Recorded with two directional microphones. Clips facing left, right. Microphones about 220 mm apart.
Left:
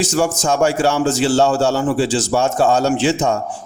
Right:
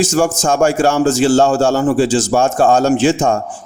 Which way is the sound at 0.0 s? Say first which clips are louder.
Right 3 dB; 45° right (ahead or behind).